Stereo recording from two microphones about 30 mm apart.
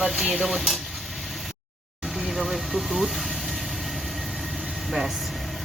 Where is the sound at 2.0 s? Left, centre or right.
Centre.